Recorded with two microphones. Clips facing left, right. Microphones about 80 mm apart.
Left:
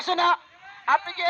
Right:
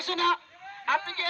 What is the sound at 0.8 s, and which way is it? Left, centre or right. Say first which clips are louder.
Speech: left 6 dB; left.